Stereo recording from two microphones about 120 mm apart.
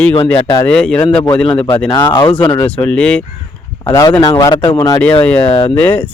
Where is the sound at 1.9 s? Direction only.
30° left (ahead or behind).